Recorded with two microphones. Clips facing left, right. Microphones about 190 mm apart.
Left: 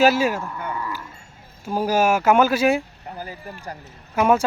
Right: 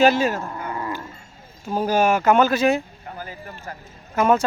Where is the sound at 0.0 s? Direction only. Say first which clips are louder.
Even; 10° left (ahead or behind).